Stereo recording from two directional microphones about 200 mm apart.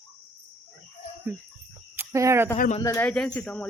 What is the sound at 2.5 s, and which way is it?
Speech, 40° left (ahead or behind).